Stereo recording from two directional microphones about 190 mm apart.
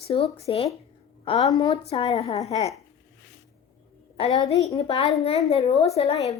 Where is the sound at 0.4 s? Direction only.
30° left (ahead or behind).